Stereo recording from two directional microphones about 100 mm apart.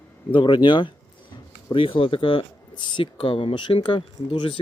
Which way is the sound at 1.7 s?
65° left (ahead or behind).